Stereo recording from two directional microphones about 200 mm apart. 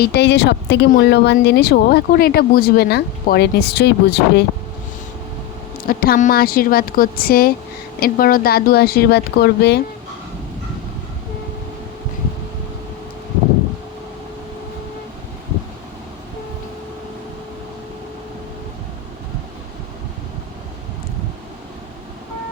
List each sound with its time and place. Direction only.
0.0 s a woman's voice: 55° left (ahead or behind)
0.9 s speech: 50° left (ahead or behind)
5.7 s speech: 45° left (ahead or behind)